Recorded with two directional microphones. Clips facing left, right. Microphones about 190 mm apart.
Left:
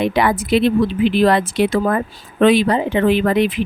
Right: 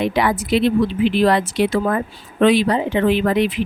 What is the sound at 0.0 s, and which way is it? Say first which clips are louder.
Speech: left 2 dB; 50° left (ahead or behind).